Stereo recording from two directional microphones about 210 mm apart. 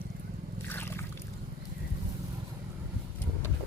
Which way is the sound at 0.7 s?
10° left (ahead or behind).